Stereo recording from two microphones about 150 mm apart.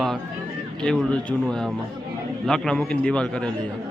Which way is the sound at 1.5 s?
5° left (ahead or behind).